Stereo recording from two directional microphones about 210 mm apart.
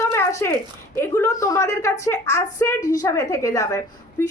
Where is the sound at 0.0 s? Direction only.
15° left (ahead or behind).